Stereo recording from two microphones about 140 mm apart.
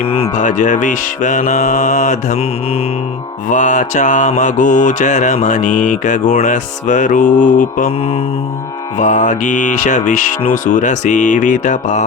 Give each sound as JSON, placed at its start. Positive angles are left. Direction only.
{"t": 0.3, "sound": "mantra", "side_deg": 60}
{"t": 3.5, "sound": "mantra", "side_deg": 60}
{"t": 9.0, "sound": "mantra", "side_deg": 60}